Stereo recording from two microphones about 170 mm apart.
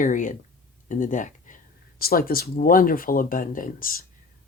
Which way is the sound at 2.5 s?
55° left (ahead or behind).